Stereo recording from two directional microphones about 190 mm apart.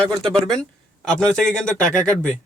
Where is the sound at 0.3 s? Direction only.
5° left (ahead or behind).